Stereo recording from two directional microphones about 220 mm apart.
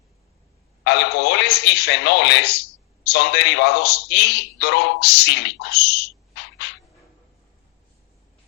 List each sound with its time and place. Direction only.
0.9 s speech: 50° left (ahead or behind)